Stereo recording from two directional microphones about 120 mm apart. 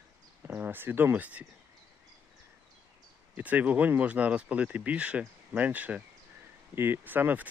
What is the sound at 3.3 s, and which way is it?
Speech, 15° right (ahead or behind).